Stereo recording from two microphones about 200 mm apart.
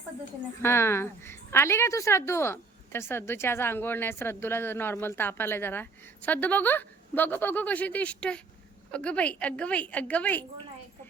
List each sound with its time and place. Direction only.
0.6 s a woman's voice: 10° left (ahead or behind)